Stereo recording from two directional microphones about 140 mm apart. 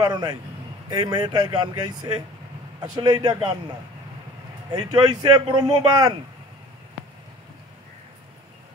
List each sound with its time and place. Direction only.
0.0 s a man's voice: 30° right (ahead or behind)
4.7 s speech: 30° right (ahead or behind)